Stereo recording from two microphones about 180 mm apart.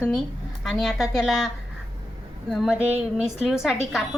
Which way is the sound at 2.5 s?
Centre (ahead or behind).